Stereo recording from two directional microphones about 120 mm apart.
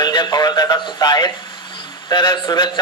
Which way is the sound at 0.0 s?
35° left (ahead or behind).